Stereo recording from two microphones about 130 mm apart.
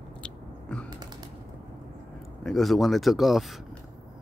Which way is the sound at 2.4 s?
Centre (ahead or behind).